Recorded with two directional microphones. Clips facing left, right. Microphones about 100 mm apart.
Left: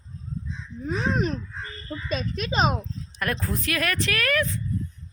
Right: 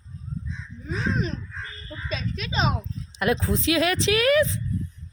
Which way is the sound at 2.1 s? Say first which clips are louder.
Left 3 dB; 50° left (ahead or behind).